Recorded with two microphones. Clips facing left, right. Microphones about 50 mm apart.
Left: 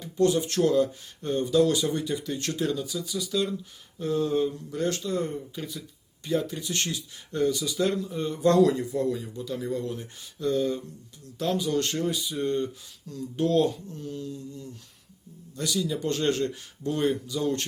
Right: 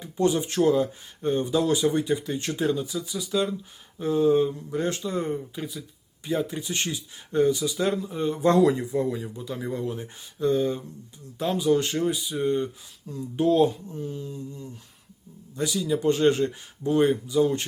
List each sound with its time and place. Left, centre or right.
0.0 s speech: centre